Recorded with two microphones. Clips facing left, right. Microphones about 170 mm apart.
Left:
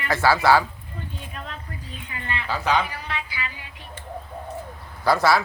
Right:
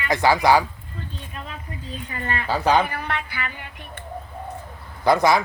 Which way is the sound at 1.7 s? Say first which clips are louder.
Right 3 dB; 25° right (ahead or behind).